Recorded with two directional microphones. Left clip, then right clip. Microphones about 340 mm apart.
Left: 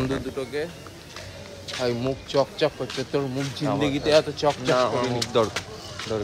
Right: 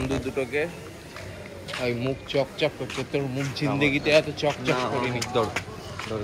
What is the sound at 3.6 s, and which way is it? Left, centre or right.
Speech, left.